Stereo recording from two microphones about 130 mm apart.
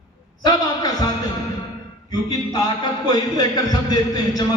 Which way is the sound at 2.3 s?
30° left (ahead or behind).